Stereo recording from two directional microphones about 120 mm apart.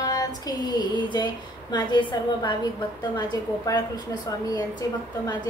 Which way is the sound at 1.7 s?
40° left (ahead or behind).